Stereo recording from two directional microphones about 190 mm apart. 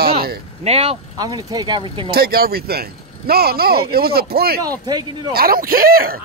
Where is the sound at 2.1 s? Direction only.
55° right (ahead or behind).